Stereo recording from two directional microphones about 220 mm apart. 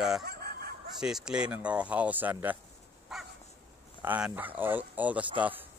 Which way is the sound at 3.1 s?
Centre (ahead or behind).